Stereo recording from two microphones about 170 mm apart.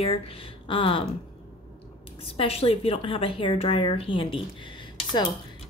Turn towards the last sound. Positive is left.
turn(degrees=25)  # may be behind; listen again after turning